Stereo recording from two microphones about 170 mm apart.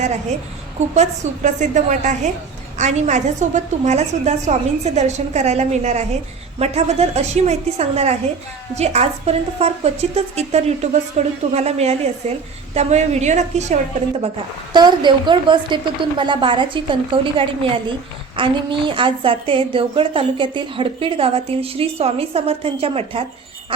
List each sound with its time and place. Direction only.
0.9 s a woman's voice: 45° right (ahead or behind)
14.7 s a woman's voice: 25° right (ahead or behind)